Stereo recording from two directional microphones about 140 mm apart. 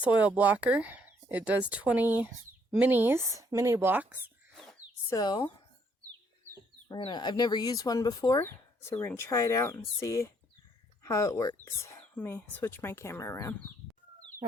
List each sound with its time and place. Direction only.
0.2 s speech: 10° right (ahead or behind)
4.5 s a sound: 5° left (ahead or behind)
5.0 s speech: 30° left (ahead or behind)
7.0 s speech: 30° left (ahead or behind); by 13.7 s 15° left (ahead or behind)